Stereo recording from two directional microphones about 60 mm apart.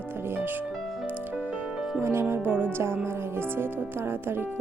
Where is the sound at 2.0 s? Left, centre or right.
Right.